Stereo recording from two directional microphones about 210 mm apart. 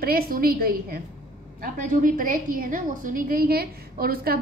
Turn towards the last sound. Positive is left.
turn(degrees=-45)  # may be behind; listen again after turning